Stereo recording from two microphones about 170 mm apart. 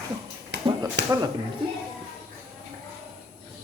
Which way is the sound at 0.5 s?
90° right.